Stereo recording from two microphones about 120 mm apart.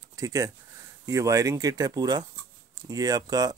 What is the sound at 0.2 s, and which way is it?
Speech, 25° right (ahead or behind).